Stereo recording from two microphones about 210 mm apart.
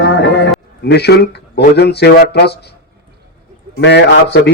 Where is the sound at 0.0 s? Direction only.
55° left (ahead or behind).